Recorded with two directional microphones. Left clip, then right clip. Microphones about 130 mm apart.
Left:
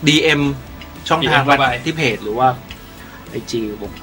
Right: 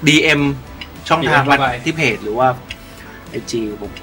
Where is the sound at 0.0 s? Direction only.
Centre (ahead or behind).